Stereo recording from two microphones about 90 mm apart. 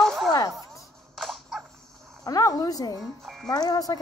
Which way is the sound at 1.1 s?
5° left (ahead or behind).